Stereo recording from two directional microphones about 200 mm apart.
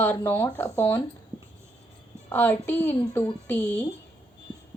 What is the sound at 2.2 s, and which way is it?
Speech, 10° left (ahead or behind).